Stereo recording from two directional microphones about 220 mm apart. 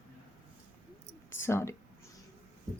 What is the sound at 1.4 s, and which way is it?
Speech, 10° left (ahead or behind).